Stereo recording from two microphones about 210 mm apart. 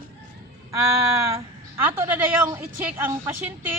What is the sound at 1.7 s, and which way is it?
Speech, 10° right (ahead or behind).